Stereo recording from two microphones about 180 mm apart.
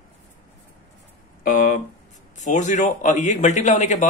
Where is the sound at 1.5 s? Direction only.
50° left (ahead or behind).